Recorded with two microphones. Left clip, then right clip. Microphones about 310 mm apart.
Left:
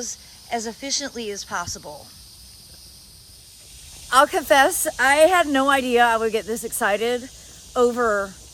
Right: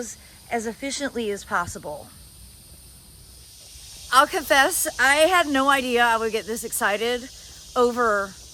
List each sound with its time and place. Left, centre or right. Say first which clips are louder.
0.0 s speech: left 3 dB; centre
4.1 s speech: left 2 dB; centre